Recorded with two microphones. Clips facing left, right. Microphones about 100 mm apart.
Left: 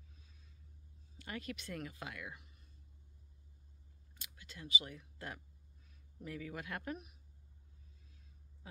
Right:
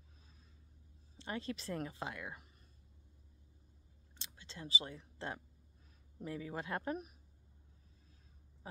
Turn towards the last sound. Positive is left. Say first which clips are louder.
# right 4 dB
turn(degrees=-35)  # may be behind; listen again after turning